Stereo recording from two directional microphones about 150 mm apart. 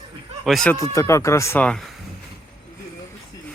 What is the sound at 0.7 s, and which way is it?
Speech, 20° left (ahead or behind).